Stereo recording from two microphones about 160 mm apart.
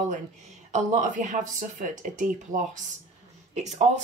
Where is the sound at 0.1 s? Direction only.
50° right (ahead or behind).